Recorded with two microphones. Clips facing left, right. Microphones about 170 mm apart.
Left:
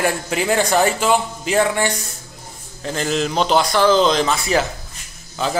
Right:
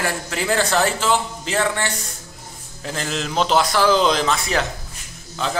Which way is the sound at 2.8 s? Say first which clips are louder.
Left 5 dB; centre (ahead or behind).